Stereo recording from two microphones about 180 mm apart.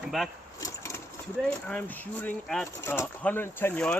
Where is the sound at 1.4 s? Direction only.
5° left (ahead or behind).